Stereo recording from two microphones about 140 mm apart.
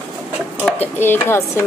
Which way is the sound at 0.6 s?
15° left (ahead or behind).